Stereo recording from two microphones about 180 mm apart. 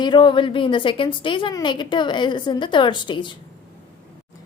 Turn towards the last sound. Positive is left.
turn(degrees=25)  # may be behind; listen again after turning